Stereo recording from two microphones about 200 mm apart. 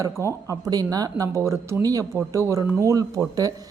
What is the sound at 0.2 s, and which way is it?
A woman's voice, 15° right (ahead or behind).